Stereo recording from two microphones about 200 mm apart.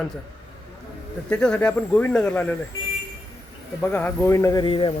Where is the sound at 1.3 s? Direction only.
5° left (ahead or behind).